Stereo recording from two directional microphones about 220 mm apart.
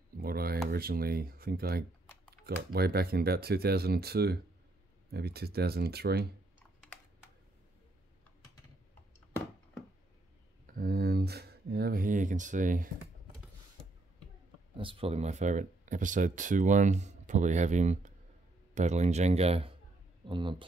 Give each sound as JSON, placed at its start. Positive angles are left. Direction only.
{"t": 0.2, "sound": "speech", "side_deg": -45}
{"t": 10.7, "sound": "speech", "side_deg": -40}
{"t": 14.8, "sound": "speech", "side_deg": -25}